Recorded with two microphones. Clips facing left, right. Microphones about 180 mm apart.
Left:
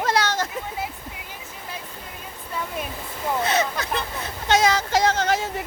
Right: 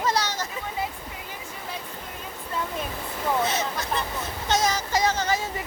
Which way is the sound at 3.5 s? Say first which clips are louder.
Left 4 dB; 70° left (ahead or behind).